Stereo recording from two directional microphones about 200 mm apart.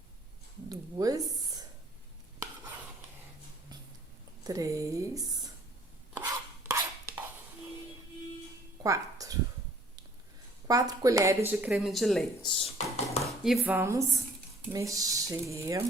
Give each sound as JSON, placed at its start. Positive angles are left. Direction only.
{"t": 0.7, "sound": "a sound", "side_deg": -20}
{"t": 4.4, "sound": "speech", "side_deg": -15}
{"t": 6.7, "sound": "chopping", "side_deg": -15}
{"t": 8.8, "sound": "music", "side_deg": -15}
{"t": 10.7, "sound": "speech", "side_deg": -15}
{"t": 11.5, "sound": "speech", "side_deg": 0}
{"t": 12.5, "sound": "speech", "side_deg": 30}
{"t": 13.2, "sound": "speech", "side_deg": 0}